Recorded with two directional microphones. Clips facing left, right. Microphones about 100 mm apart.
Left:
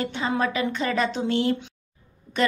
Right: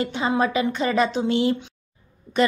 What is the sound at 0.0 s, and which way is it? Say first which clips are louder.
A woman's voice: right 3 dB; 15° right (ahead or behind).